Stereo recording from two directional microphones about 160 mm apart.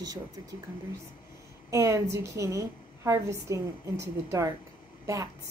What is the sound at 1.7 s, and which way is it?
A woman's voice, 20° right (ahead or behind).